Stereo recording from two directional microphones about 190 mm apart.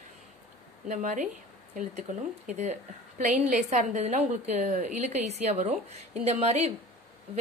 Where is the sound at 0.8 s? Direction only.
40° right (ahead or behind).